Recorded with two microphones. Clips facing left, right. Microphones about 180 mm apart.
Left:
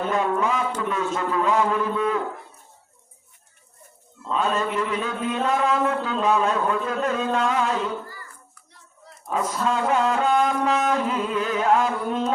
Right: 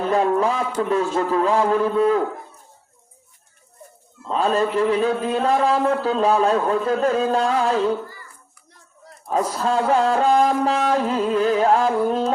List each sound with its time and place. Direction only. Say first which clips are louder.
0.1 s speech: right 5 dB; 35° right (ahead or behind)
4.3 s speech: right 4 dB; 35° right (ahead or behind)
9.0 s speech: right 4 dB; 35° right (ahead or behind)